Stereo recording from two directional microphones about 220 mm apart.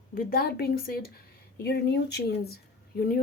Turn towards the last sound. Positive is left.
turn(degrees=45)  # may be behind; listen again after turning